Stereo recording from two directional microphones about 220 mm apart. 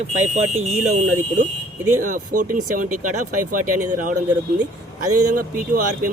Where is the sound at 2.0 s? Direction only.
35° right (ahead or behind).